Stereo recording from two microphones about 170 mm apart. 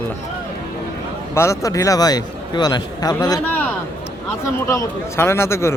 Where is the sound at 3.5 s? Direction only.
10° left (ahead or behind).